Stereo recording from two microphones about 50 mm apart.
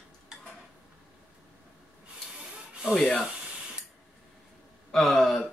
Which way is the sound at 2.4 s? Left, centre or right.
Centre.